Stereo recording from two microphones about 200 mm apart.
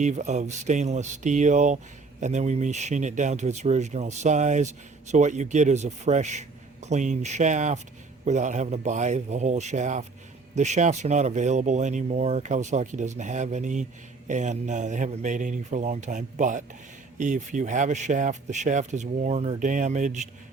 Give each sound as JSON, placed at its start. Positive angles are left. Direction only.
{"t": 0.0, "sound": "speech", "side_deg": -35}